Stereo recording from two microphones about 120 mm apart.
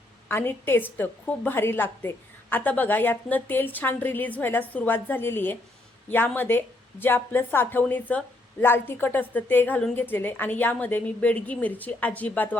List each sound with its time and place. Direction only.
0.3 s a woman's voice: 20° left (ahead or behind)